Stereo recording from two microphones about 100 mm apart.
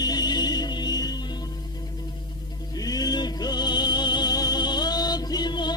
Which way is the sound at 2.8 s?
40° left (ahead or behind).